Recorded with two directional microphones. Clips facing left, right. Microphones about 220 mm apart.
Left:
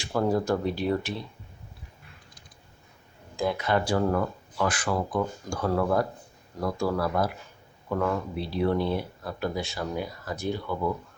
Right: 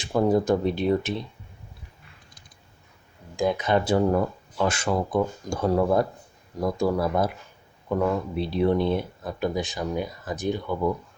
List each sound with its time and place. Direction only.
0.0 s speech: 20° right (ahead or behind)
3.3 s speech: 20° right (ahead or behind)